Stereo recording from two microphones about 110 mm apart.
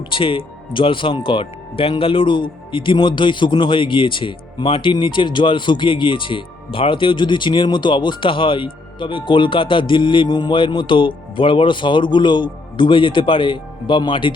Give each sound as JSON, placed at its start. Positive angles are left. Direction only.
{"t": 0.1, "sound": "speech", "side_deg": 50}